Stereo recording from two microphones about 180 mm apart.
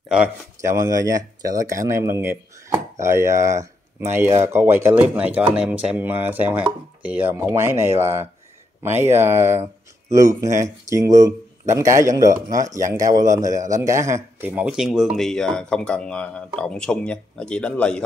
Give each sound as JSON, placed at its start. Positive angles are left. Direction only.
{"t": 0.6, "sound": "speech", "side_deg": -15}
{"t": 4.5, "sound": "chopping", "side_deg": -15}
{"t": 12.6, "sound": "speech", "side_deg": -20}